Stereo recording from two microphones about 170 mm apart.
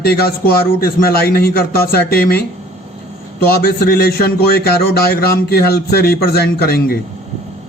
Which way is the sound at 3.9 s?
65° left (ahead or behind).